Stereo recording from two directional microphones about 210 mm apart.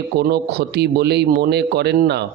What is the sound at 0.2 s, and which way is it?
Speech, 50° right (ahead or behind).